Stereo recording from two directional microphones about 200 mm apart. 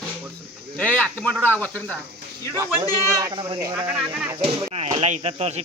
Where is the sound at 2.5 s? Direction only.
15° right (ahead or behind).